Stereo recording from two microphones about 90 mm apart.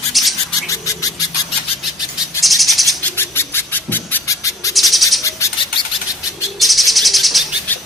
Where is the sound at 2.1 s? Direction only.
Centre (ahead or behind).